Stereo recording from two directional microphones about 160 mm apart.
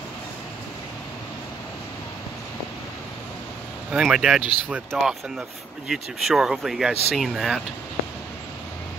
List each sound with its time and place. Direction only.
3.9 s speech: 5° right (ahead or behind)